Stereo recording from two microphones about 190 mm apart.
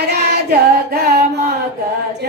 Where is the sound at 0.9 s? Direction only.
60° right (ahead or behind).